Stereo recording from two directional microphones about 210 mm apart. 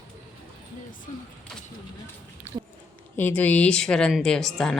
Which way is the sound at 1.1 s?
35° left (ahead or behind).